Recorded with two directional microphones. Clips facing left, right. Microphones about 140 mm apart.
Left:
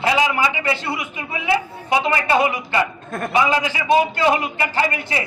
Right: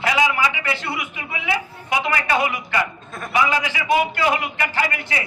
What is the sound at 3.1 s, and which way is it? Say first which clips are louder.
Speech: left 7 dB; 55° left (ahead or behind).